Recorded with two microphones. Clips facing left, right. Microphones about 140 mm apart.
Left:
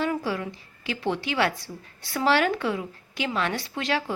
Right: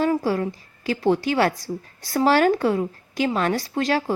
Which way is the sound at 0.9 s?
40° right (ahead or behind).